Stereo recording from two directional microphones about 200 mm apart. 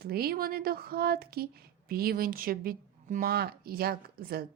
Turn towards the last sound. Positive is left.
turn(degrees=-50)  # may be behind; listen again after turning